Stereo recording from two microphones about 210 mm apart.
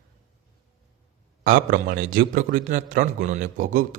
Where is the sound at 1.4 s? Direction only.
40° right (ahead or behind).